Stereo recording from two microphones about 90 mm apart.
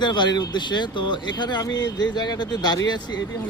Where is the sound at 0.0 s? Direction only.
55° left (ahead or behind).